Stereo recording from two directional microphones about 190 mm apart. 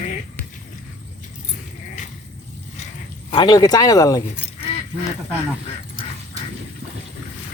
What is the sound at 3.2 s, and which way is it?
Speech, 25° left (ahead or behind).